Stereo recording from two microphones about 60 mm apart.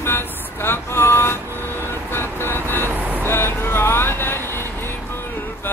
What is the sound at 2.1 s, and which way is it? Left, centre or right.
Music, left.